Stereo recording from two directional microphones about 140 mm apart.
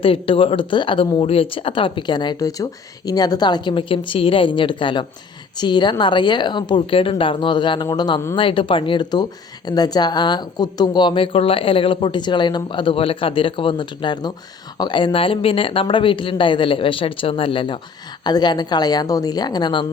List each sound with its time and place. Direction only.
0.0 s a woman's voice: 40° left (ahead or behind)